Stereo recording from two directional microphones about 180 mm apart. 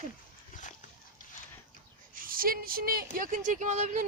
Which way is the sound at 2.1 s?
50° right (ahead or behind).